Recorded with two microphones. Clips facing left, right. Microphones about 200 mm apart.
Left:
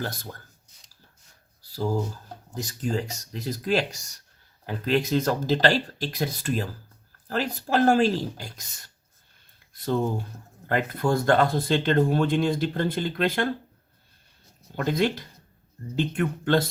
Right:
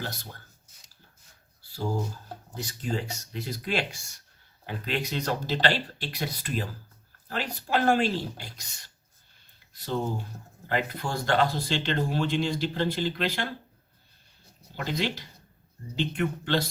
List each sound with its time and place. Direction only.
0.0 s speech: 50° left (ahead or behind)
2.6 s speech: 45° left (ahead or behind)
10.7 s speech: 50° left (ahead or behind)
14.8 s speech: 50° left (ahead or behind)